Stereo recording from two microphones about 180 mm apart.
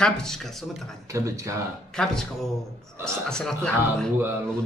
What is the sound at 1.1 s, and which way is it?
Speech, 15° right (ahead or behind).